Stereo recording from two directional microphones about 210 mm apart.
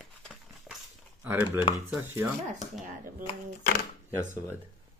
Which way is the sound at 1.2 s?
10° right (ahead or behind).